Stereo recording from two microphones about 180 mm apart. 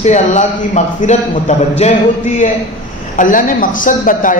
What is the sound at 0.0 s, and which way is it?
A man's voice, 40° left (ahead or behind).